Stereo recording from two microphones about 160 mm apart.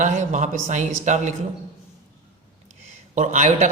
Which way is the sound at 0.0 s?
50° right (ahead or behind).